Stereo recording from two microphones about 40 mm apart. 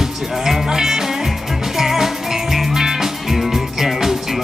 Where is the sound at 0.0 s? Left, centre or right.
Centre.